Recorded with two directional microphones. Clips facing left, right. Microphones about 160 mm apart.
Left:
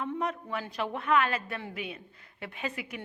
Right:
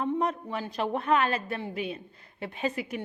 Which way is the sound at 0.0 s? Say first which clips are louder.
Right 4 dB; 35° right (ahead or behind).